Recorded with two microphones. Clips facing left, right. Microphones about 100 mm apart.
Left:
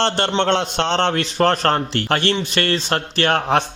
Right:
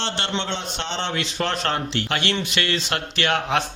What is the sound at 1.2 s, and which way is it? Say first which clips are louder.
A man's voice: left 8 dB; 45° left (ahead or behind).